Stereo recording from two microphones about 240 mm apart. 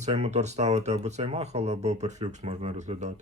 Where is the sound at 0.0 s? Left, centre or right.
Right.